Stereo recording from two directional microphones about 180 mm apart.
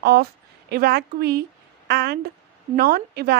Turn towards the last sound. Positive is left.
turn(degrees=-60)  # may be behind; listen again after turning